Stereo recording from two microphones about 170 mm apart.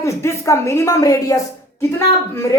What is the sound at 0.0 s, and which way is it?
A woman's voice, 15° left (ahead or behind).